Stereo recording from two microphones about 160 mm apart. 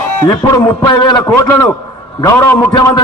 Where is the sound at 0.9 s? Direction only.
25° left (ahead or behind).